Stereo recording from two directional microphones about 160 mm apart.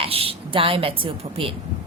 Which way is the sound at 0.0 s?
35° right (ahead or behind).